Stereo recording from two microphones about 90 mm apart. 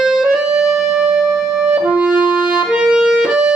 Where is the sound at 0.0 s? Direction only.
10° right (ahead or behind).